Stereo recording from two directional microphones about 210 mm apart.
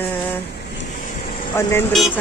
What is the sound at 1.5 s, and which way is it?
Speech, 10° left (ahead or behind).